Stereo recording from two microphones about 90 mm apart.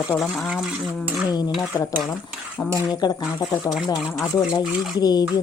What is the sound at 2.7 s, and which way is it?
Speech, 50° left (ahead or behind).